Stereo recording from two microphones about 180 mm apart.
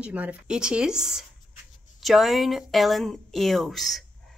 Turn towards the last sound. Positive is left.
turn(degrees=0)  # may be behind; listen again after turning